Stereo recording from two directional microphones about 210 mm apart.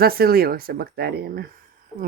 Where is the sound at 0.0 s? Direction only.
45° right (ahead or behind).